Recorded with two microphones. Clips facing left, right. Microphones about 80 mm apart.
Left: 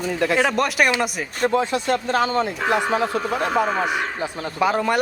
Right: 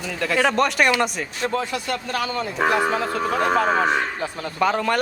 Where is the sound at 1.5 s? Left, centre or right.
Left.